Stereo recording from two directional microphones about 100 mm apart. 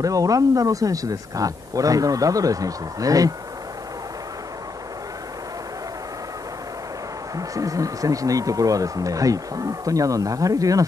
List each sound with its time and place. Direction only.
0.0 s speech: 35° right (ahead or behind)
7.3 s speech: 35° right (ahead or behind)